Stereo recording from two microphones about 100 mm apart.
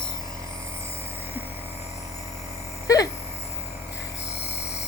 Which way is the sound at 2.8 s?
35° left (ahead or behind).